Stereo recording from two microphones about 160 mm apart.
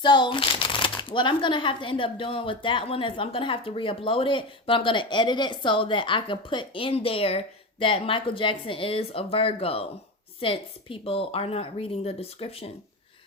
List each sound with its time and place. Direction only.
0.0 s speech: 30° left (ahead or behind)